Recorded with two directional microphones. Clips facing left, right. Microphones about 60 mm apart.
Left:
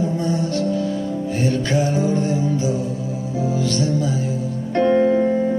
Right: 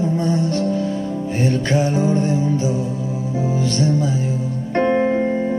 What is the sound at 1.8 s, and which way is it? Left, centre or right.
Music, right.